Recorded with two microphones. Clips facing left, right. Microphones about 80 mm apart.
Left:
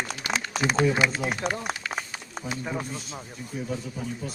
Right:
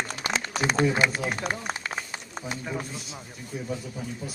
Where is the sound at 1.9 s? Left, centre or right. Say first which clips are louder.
Left 1 dB; centre.